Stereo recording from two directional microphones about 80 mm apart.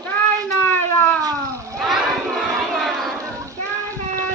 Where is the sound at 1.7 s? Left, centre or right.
Centre.